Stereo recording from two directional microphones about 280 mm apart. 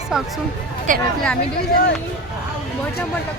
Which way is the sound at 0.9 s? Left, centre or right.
Right.